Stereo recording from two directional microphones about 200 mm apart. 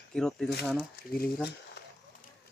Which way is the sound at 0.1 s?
5° left (ahead or behind).